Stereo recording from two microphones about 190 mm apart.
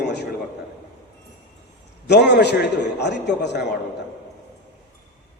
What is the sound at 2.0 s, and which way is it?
A man's voice, 65° left (ahead or behind).